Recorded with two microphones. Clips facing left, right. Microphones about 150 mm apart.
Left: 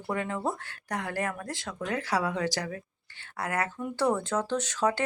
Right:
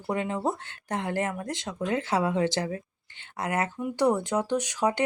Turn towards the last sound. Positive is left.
turn(degrees=-15)  # may be behind; listen again after turning